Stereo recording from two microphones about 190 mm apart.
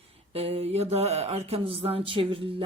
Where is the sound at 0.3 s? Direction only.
30° right (ahead or behind).